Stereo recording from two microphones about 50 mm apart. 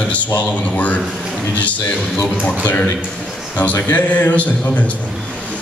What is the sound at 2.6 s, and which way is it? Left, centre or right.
A man's voice, left.